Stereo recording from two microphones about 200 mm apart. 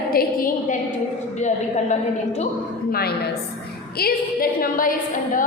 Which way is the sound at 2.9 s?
50° left (ahead or behind).